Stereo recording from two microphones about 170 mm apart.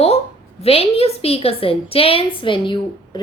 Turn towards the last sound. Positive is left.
turn(degrees=30)  # may be behind; listen again after turning